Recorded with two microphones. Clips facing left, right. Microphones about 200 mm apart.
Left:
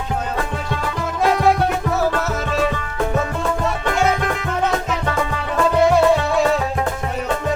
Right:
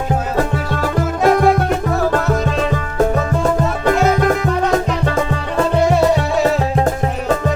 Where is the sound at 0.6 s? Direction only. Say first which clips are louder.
Right 5 dB; 50° right (ahead or behind); by 5.4 s 35° right (ahead or behind).